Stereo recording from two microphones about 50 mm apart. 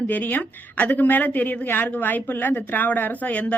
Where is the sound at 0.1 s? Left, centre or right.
Left.